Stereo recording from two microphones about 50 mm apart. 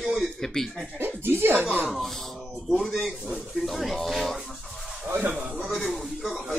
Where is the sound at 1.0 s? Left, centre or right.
Right.